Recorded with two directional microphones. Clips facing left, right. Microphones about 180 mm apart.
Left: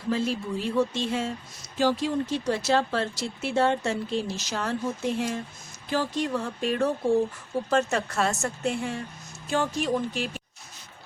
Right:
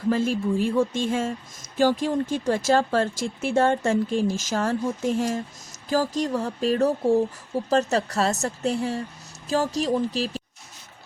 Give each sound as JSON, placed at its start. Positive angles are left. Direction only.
{"t": 0.1, "sound": "speech", "side_deg": -50}